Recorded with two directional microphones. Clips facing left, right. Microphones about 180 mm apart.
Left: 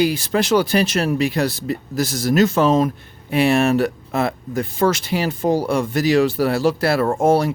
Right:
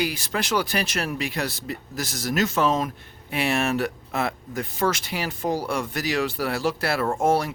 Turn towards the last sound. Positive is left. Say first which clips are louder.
# left 6 dB
turn(degrees=30)  # may be behind; listen again after turning